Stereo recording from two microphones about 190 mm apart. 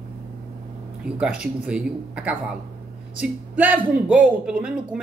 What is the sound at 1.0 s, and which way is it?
Speech, 5° right (ahead or behind).